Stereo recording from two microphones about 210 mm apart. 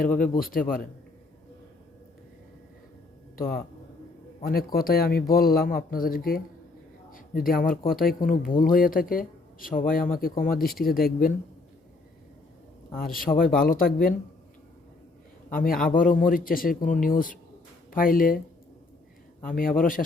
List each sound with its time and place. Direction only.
0.2 s speech: 45° left (ahead or behind)
3.3 s a man's voice: 45° left (ahead or behind)
13.0 s speech: 45° left (ahead or behind)
15.4 s a man's voice: 40° left (ahead or behind)
19.4 s a man's voice: 40° left (ahead or behind)